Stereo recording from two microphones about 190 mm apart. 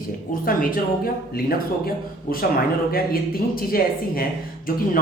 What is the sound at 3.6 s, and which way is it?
Speech, 50° left (ahead or behind).